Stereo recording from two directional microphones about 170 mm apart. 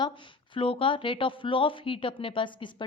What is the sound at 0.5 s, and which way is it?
Speech, 30° left (ahead or behind).